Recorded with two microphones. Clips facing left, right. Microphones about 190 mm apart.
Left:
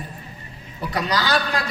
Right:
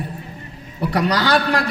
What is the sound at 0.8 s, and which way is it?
Speech, 65° right (ahead or behind).